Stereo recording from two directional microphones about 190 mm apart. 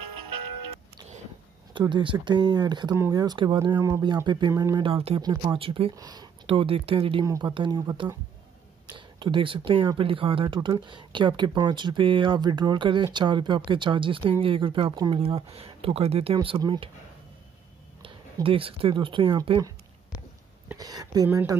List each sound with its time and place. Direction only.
1.7 s speech: 25° right (ahead or behind)
18.0 s speech: 30° right (ahead or behind)